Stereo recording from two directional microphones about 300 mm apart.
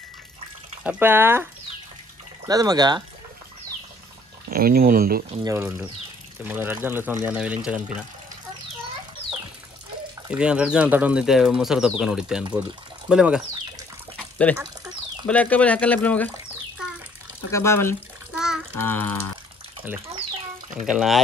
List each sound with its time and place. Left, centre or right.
0.8 s speech: centre
4.5 s speech: right
5.4 s speech: centre
10.3 s speech: centre
15.2 s speech: centre
17.5 s speech: centre
18.3 s child singing: centre
19.8 s speech: centre
20.2 s a sound: centre
20.8 s speech: centre